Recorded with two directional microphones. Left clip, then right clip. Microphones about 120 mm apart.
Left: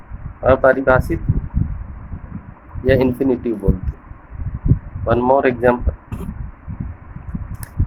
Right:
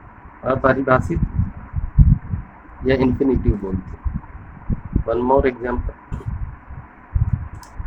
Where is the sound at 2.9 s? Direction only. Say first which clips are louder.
Left 2 dB; 45° left (ahead or behind).